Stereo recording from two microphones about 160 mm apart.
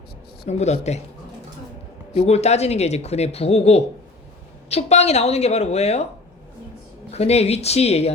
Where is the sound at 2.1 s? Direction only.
40° left (ahead or behind).